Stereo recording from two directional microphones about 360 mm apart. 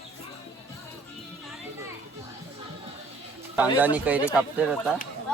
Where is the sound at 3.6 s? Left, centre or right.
Centre.